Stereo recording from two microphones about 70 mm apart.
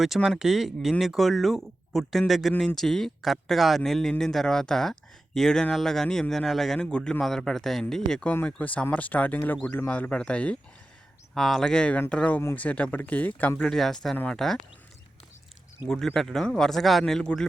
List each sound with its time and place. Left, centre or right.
0.0 s speech: centre
6.7 s a man's voice: centre
8.4 s speech: centre
11.3 s a man's voice: centre; by 13.5 s left
13.6 s speech: centre
15.9 s a man's voice: centre